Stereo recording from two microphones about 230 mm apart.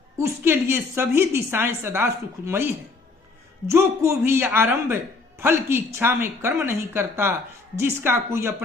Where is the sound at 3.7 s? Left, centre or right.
Centre.